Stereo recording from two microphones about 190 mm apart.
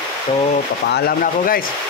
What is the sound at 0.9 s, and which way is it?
Speech, 50° left (ahead or behind).